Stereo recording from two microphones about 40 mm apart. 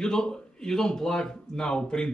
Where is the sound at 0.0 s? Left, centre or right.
Centre.